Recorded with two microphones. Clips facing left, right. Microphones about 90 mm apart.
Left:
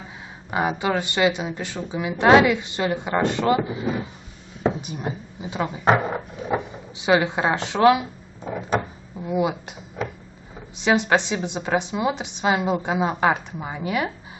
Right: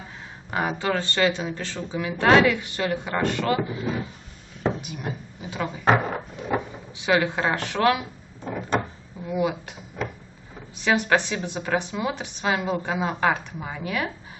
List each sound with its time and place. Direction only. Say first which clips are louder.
0.5 s a woman's voice: left 2 dB; 10° left (ahead or behind)
9.2 s a woman's voice: left 2 dB; 20° left (ahead or behind)
10.8 s a woman's voice: left 2 dB; 20° left (ahead or behind)